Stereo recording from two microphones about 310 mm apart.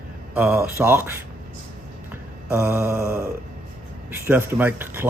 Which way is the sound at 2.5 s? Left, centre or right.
Centre.